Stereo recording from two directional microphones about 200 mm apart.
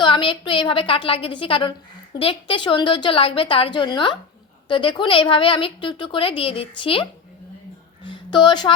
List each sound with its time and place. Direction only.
0.0 s a woman's voice: 25° left (ahead or behind)